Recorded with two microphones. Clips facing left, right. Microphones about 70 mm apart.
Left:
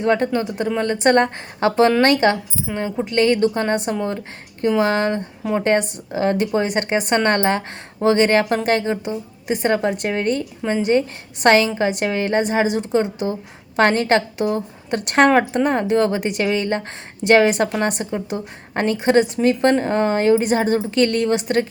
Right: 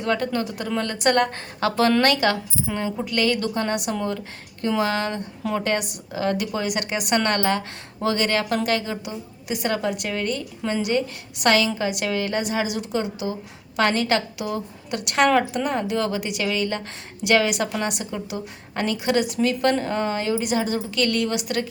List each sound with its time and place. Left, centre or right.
0.0 s a woman's voice: left